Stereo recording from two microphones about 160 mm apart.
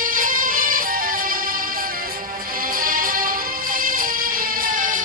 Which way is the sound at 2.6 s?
60° right (ahead or behind).